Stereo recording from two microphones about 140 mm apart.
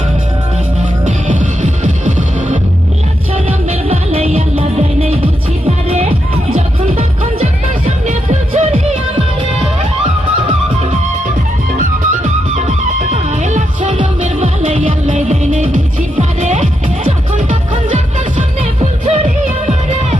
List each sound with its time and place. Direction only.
1.0 s music: 65° right (ahead or behind)
3.3 s music: 45° right (ahead or behind)
8.0 s music: 55° right (ahead or behind)
11.8 s music: 55° right (ahead or behind)